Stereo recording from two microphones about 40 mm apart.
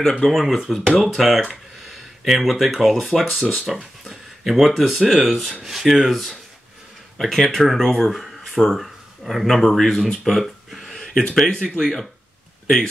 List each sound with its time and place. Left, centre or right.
0.2 s speech: centre
10.9 s a sound: centre
11.4 s speech: left
11.8 s speech: centre